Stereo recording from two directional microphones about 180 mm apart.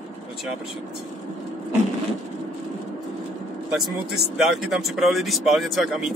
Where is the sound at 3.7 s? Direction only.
Centre (ahead or behind).